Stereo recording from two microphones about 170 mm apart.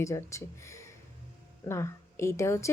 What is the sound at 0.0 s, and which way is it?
A woman's voice, 15° left (ahead or behind).